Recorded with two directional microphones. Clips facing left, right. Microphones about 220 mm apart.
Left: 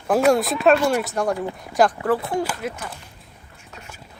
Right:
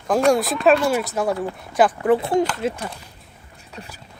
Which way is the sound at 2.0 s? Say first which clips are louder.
Right 4 dB; 25° right (ahead or behind).